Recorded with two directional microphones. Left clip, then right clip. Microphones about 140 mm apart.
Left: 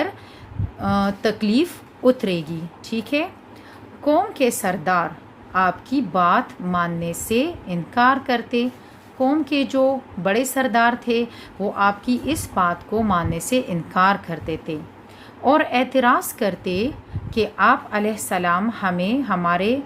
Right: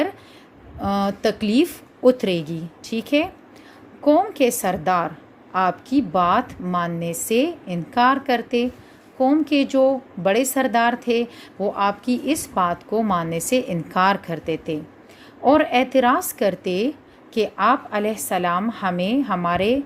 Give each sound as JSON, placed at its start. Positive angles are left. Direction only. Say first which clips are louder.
{"t": 0.8, "sound": "a woman's voice", "louder": "even", "side_deg": -30}